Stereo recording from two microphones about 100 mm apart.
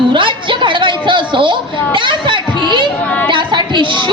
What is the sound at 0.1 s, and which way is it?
A woman's voice, 55° right (ahead or behind).